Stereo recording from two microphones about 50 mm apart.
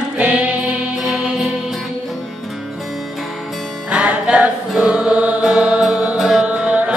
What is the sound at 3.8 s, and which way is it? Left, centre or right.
Music, right.